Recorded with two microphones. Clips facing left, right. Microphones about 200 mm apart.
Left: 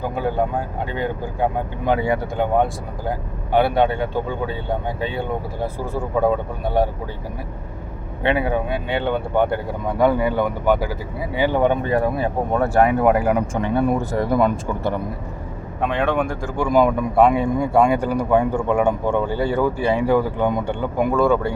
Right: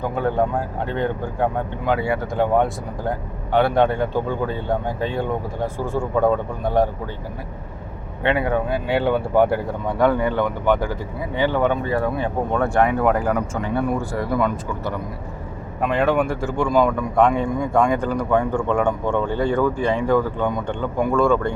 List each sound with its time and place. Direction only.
0.9 s speech: 5° left (ahead or behind)
1.9 s speech: 20° left (ahead or behind)
2.3 s speech: centre (ahead or behind)
8.2 s speech: 10° left (ahead or behind)
8.7 s speech: 5° right (ahead or behind)
10.0 s speech: 10° left (ahead or behind)
14.3 s speech: 30° left (ahead or behind)
15.9 s speech: 5° right (ahead or behind)
16.6 s speech: 20° left (ahead or behind)
17.2 s speech: 10° left (ahead or behind)